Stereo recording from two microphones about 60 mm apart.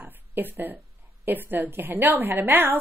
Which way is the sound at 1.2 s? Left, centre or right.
Right.